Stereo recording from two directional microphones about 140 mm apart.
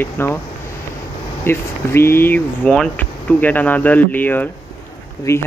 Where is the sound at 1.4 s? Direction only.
15° left (ahead or behind).